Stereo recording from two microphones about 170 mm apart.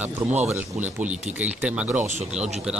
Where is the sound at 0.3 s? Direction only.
40° right (ahead or behind).